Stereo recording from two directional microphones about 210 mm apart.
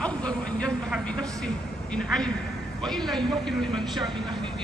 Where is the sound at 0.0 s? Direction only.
5° left (ahead or behind).